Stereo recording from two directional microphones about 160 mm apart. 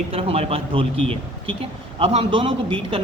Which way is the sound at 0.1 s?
35° right (ahead or behind).